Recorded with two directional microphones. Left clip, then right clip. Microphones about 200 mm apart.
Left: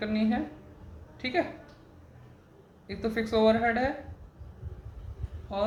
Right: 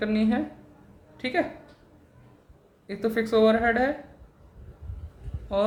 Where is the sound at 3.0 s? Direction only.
35° right (ahead or behind).